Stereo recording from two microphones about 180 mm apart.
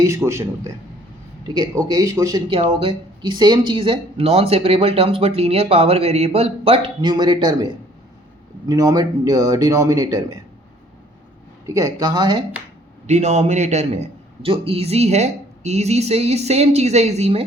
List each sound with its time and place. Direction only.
0.3 s a man's voice: 15° right (ahead or behind)
2.5 s speech: 30° right (ahead or behind)
11.6 s speech: 20° right (ahead or behind)
13.1 s speech: 40° right (ahead or behind)